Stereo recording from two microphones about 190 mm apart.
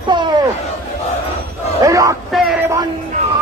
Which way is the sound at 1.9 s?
15° right (ahead or behind).